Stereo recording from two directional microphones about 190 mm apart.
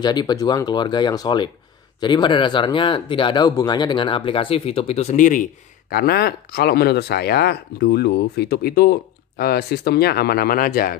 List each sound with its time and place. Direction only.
0.0 s speech: 20° left (ahead or behind); by 11.0 s 50° left (ahead or behind)